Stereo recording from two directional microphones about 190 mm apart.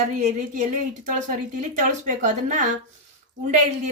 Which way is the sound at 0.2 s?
40° right (ahead or behind).